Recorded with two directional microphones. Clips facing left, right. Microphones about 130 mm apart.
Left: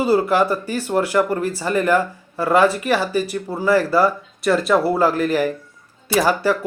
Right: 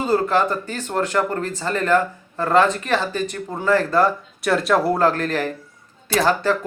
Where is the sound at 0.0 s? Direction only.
10° left (ahead or behind).